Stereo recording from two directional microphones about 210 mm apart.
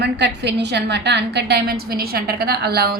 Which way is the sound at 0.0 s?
55° right (ahead or behind).